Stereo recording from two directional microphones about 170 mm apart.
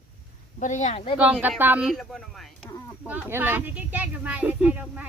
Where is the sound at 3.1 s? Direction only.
10° right (ahead or behind).